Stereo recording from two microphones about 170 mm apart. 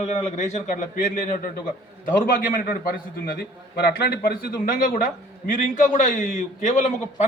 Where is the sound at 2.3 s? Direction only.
55° left (ahead or behind).